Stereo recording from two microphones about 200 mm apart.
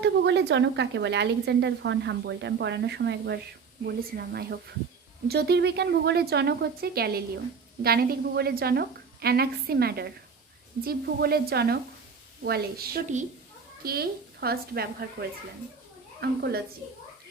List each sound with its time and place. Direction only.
0.0 s a woman's voice: 60° right (ahead or behind)
16.2 s a woman's voice: 50° right (ahead or behind)